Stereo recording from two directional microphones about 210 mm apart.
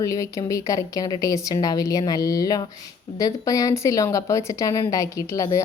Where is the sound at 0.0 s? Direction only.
15° left (ahead or behind).